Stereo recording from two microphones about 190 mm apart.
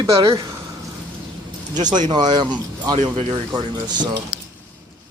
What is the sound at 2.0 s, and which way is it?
Speech, 20° right (ahead or behind).